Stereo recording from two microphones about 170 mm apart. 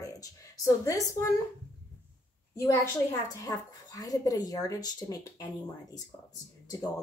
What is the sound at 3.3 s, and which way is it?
A woman's voice, 20° left (ahead or behind).